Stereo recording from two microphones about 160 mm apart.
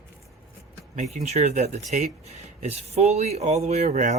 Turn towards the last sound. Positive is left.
turn(degrees=-50)  # may be behind; listen again after turning